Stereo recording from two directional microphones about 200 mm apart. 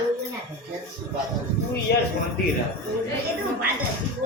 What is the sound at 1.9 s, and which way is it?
Speech, 55° left (ahead or behind).